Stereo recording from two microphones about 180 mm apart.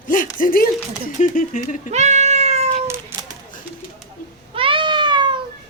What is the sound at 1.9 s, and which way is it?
Cat, 40° right (ahead or behind).